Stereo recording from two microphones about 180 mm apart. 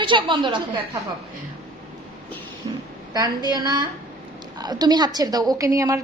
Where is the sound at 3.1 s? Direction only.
25° right (ahead or behind).